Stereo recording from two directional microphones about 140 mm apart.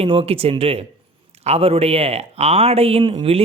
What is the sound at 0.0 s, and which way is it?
Speech, 40° right (ahead or behind).